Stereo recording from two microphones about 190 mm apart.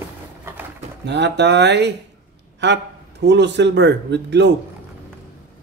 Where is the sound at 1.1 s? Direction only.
65° right (ahead or behind).